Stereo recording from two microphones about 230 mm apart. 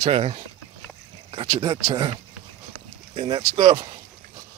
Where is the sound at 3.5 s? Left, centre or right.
Right.